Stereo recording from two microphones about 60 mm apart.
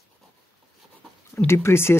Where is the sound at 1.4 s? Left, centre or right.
Left.